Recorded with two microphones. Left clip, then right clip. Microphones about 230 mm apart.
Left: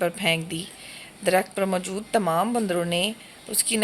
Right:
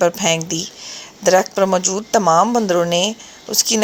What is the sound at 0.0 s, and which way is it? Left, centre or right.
A woman's voice, centre.